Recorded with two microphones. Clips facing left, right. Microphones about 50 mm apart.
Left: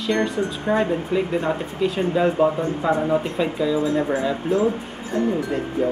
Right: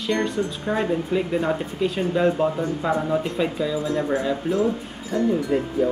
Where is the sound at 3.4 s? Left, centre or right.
Centre.